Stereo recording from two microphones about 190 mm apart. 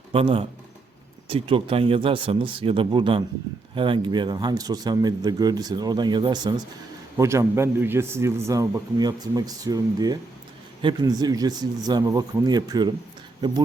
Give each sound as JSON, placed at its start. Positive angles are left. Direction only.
{"t": 0.1, "sound": "a man's voice", "side_deg": -30}